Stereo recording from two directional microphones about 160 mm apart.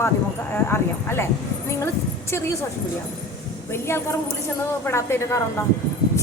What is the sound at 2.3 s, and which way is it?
Speech, 15° left (ahead or behind).